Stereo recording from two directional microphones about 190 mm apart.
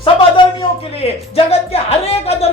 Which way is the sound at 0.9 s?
30° left (ahead or behind).